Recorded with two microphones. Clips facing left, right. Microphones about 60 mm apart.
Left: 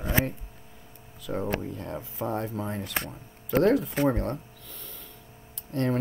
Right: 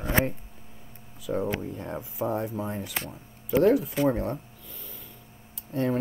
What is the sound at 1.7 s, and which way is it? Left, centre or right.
Speech, right.